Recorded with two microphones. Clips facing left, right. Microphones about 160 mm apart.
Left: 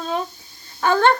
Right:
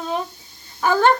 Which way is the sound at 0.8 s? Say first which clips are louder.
Even; 10° right (ahead or behind).